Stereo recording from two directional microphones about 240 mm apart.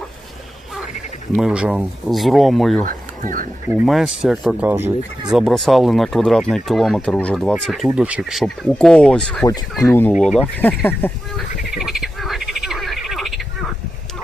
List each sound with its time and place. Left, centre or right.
1.4 s speech: centre
2.8 s speech: right
3.8 s speech: centre
11.7 s frog: centre